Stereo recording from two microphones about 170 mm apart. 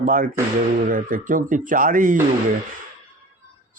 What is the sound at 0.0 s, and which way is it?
Speech, 55° right (ahead or behind).